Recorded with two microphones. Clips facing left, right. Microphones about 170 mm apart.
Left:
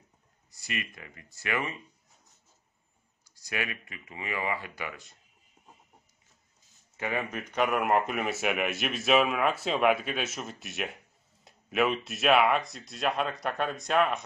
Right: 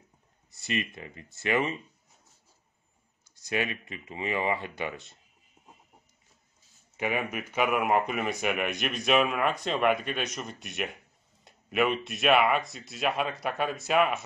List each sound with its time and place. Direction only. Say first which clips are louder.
0.6 s speech: right 5 dB; 25° right (ahead or behind)
3.3 s speech: right 4 dB; 25° right (ahead or behind)
7.0 s speech: right 2 dB; 15° right (ahead or behind)